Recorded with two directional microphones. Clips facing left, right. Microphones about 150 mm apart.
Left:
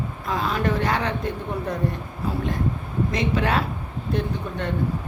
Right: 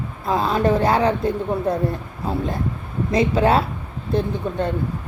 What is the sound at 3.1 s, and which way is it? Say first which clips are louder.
Speech: right 7 dB; 30° right (ahead or behind).